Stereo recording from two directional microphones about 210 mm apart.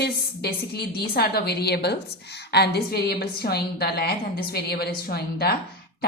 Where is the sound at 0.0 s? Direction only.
50° left (ahead or behind).